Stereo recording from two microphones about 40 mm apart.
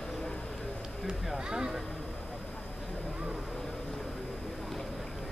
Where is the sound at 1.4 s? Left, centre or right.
Centre.